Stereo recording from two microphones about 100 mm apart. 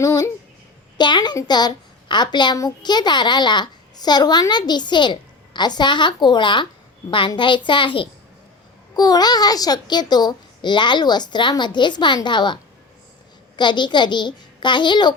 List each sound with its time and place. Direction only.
0.0 s speech: 35° left (ahead or behind)
0.9 s a child's voice: 50° left (ahead or behind)
9.0 s a child's voice: 40° left (ahead or behind)
13.6 s a child's voice: 50° left (ahead or behind)